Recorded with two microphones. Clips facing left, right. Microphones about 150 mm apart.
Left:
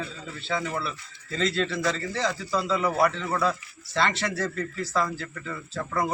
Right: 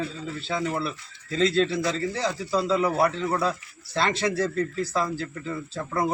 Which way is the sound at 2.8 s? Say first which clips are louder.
Right 2 dB; 5° right (ahead or behind).